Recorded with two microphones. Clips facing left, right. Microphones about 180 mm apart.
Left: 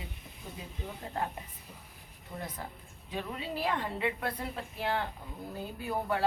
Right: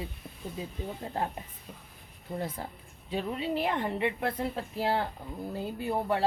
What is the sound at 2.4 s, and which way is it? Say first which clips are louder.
A woman's voice: right 4 dB; 30° right (ahead or behind).